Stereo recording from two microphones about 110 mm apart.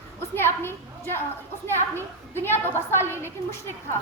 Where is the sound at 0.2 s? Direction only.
20° left (ahead or behind).